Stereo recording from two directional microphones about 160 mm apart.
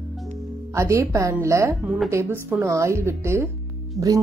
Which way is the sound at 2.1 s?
15° right (ahead or behind).